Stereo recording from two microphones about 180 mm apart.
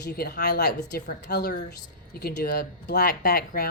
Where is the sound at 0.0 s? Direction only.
65° left (ahead or behind).